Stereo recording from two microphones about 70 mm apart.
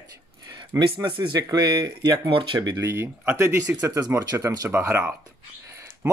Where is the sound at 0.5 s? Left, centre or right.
Right.